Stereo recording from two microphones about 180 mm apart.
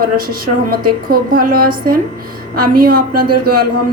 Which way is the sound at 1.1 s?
55° right (ahead or behind).